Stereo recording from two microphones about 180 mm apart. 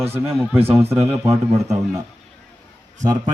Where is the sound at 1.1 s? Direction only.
15° right (ahead or behind).